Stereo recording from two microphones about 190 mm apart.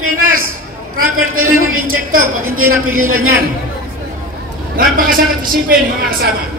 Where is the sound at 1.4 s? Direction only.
90° right.